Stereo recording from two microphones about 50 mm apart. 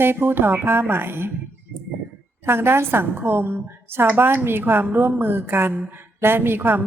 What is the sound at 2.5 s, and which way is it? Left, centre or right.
A woman's voice, right.